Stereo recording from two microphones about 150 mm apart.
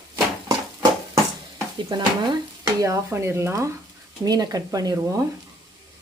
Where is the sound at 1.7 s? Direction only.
30° right (ahead or behind).